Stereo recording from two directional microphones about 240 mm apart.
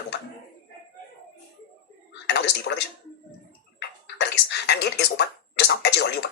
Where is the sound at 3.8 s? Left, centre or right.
Left.